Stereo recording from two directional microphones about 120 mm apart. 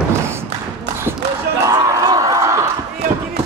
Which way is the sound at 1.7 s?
30° right (ahead or behind).